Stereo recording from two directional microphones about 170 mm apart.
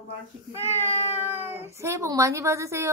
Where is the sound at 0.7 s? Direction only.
15° right (ahead or behind).